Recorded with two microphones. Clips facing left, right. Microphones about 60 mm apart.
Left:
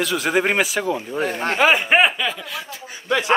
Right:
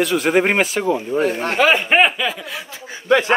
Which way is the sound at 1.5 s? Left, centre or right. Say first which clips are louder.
Right 1 dB; centre.